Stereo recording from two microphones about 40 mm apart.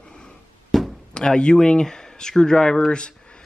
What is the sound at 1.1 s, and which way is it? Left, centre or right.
Speech, left.